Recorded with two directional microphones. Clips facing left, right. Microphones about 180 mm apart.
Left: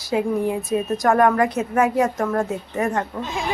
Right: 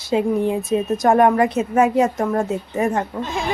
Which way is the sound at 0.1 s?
25° right (ahead or behind).